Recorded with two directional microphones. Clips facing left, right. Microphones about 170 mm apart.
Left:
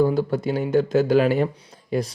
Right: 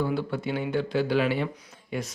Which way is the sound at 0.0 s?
40° left (ahead or behind).